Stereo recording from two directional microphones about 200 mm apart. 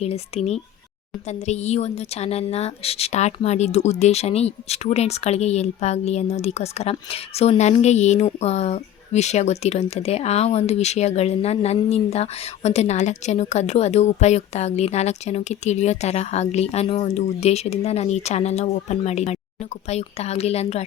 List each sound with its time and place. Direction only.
0.0 s a woman's voice: 30° left (ahead or behind)